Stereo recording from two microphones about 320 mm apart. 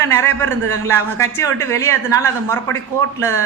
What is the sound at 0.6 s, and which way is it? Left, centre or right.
Speech, right.